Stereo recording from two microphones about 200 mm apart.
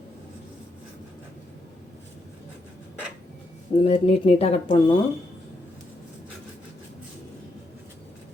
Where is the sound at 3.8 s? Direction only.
30° left (ahead or behind).